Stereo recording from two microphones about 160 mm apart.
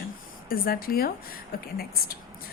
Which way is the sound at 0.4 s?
65° left (ahead or behind).